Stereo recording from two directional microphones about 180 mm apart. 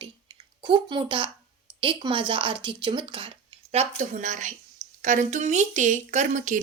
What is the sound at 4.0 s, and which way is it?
A woman's voice, 45° right (ahead or behind).